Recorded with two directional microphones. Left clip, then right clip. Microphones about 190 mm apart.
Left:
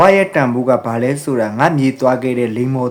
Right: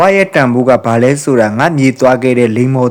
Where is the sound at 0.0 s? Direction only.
30° right (ahead or behind).